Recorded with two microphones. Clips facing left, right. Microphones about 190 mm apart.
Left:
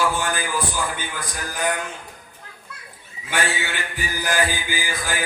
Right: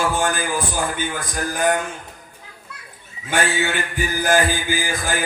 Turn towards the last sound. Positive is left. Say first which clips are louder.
# right 4 dB
turn(degrees=-45)  # may be behind; listen again after turning